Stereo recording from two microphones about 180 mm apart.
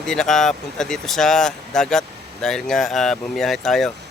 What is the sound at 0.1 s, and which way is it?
Speech, centre (ahead or behind).